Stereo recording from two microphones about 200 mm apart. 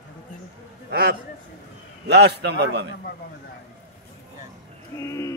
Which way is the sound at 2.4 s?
55° right (ahead or behind).